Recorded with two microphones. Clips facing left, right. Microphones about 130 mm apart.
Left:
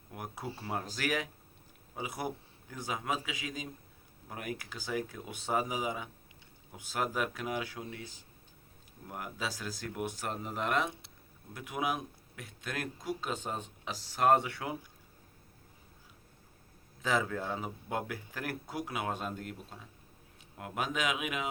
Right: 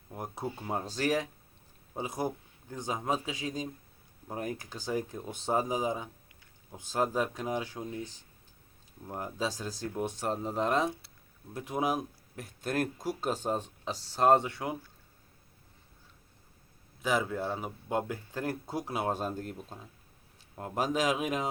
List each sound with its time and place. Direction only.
0.1 s speech: 25° right (ahead or behind)
9.0 s speech: 30° right (ahead or behind)
17.0 s speech: 15° right (ahead or behind); by 21.5 s 35° right (ahead or behind)